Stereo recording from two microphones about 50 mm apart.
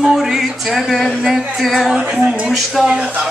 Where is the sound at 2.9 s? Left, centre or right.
Right.